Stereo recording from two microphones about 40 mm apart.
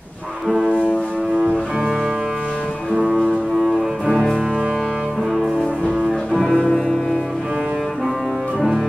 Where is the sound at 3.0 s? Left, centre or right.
Centre.